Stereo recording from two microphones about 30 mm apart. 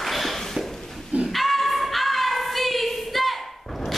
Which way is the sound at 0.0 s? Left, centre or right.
Centre.